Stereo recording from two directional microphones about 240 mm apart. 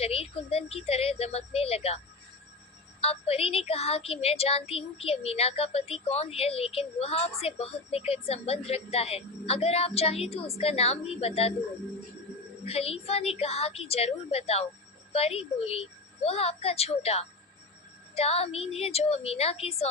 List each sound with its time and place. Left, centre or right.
0.0 s speech: left
3.0 s speech: left
12.6 s speech: left